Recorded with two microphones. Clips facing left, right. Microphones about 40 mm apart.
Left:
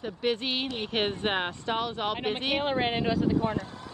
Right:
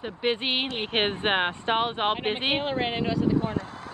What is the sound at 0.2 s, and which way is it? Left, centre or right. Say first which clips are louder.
Speech: right 3 dB; right.